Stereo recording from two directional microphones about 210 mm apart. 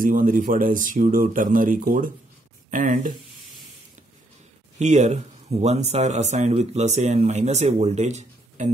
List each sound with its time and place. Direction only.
0.0 s speech: 40° right (ahead or behind)
4.7 s speech: 35° right (ahead or behind)